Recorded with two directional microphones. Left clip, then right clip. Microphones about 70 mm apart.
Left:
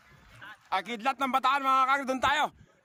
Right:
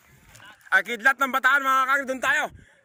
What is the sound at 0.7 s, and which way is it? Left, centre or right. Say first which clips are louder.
Speech: right 9 dB; centre.